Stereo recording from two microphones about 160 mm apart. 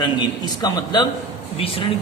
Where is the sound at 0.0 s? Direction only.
30° left (ahead or behind).